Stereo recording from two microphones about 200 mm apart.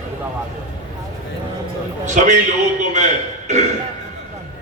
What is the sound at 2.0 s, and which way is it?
A man's voice, 35° right (ahead or behind).